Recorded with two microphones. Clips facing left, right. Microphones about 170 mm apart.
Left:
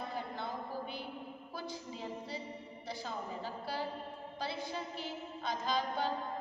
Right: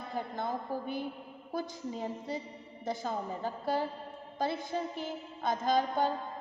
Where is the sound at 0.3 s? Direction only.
45° right (ahead or behind).